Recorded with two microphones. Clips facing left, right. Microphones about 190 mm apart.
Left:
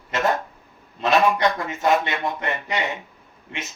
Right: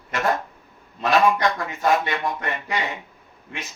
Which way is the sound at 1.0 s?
25° left (ahead or behind).